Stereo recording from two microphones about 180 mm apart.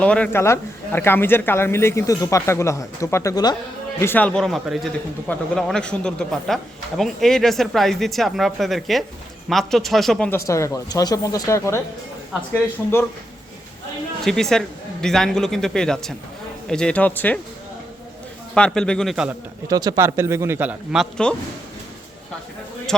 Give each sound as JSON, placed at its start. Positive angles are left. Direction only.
{"t": 0.0, "sound": "speech", "side_deg": 5}
{"t": 10.3, "sound": "speech", "side_deg": 15}
{"t": 14.3, "sound": "speech", "side_deg": 0}
{"t": 18.5, "sound": "speech", "side_deg": 5}
{"t": 19.6, "sound": "a man's voice", "side_deg": -20}